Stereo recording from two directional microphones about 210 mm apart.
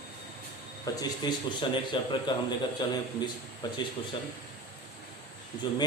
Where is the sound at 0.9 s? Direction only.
15° left (ahead or behind).